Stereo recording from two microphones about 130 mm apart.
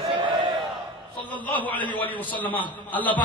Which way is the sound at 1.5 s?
15° left (ahead or behind).